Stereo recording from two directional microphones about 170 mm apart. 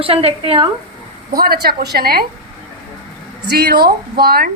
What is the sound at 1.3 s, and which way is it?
Speech, 60° right (ahead or behind).